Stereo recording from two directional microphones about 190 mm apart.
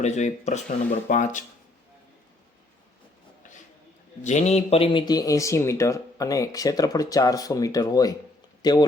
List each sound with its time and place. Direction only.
0.0 s speech: 40° left (ahead or behind)
4.2 s speech: 40° left (ahead or behind); by 8.9 s 20° left (ahead or behind)